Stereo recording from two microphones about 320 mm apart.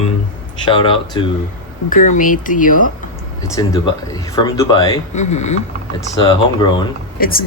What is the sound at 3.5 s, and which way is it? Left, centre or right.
Speech, centre.